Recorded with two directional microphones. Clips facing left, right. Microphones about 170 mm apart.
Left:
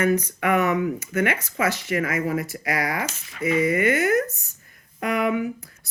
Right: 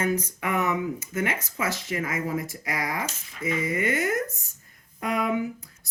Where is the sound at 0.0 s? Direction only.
65° left (ahead or behind).